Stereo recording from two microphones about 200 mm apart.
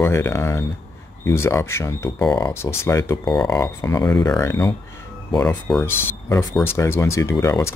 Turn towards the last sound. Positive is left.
turn(degrees=15)  # may be behind; listen again after turning